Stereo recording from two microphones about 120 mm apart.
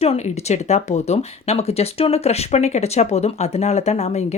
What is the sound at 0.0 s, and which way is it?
Speech, 60° left (ahead or behind).